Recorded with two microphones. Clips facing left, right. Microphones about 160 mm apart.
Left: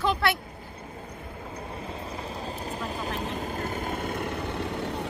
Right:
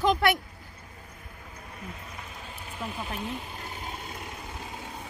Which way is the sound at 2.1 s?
35° left (ahead or behind).